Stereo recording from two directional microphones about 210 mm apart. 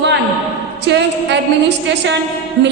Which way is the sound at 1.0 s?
55° right (ahead or behind).